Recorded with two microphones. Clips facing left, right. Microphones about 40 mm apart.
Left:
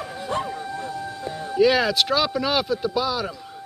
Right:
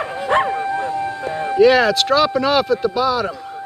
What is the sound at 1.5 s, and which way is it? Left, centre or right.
Speech, centre.